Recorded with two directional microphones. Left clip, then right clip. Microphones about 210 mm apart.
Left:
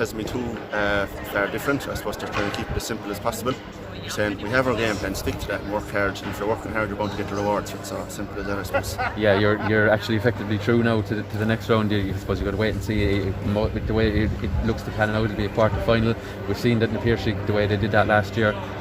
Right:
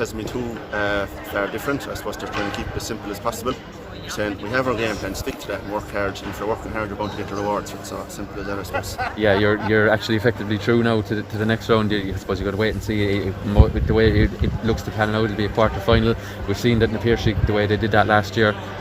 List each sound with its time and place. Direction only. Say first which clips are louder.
0.7 s speech: even; centre (ahead or behind)
8.7 s speech: left 2 dB; 45° right (ahead or behind)